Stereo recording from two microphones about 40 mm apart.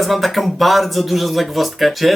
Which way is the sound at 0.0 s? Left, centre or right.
Centre.